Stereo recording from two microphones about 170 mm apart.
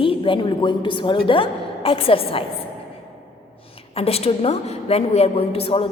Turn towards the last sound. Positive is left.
turn(degrees=35)  # may be behind; listen again after turning